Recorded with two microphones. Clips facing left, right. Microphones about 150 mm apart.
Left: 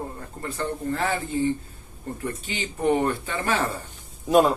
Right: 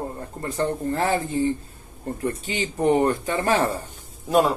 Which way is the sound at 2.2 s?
35° right (ahead or behind).